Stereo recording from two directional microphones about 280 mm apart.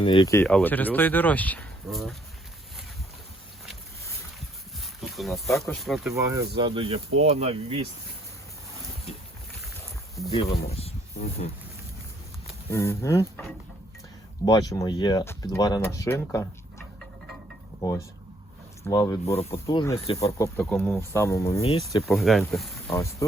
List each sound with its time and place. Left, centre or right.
0.0 s speech: centre
4.8 s a sound: centre
5.5 s speech: centre
5.8 s speech: centre; by 7.9 s right
10.2 s speech: left
12.7 s speech: centre
14.4 s speech: centre
17.7 s speech: centre
22.0 s speech: centre